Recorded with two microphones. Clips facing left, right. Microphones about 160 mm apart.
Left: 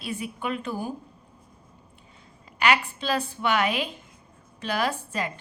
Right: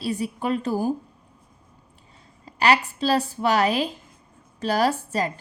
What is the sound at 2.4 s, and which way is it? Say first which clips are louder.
Speech: right 3 dB; 35° right (ahead or behind).